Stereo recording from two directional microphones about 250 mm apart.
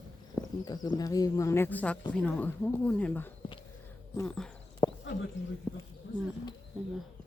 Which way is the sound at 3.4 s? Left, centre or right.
Centre.